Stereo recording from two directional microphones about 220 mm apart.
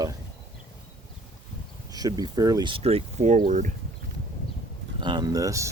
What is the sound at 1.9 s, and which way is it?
Speech, 15° right (ahead or behind).